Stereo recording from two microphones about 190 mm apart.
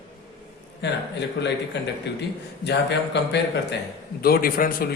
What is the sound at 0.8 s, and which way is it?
Speech, 65° left (ahead or behind).